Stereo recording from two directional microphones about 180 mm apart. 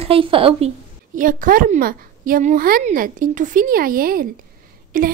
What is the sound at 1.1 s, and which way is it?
Speech, 50° right (ahead or behind).